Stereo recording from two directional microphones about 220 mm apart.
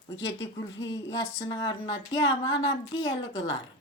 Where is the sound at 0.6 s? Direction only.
20° left (ahead or behind).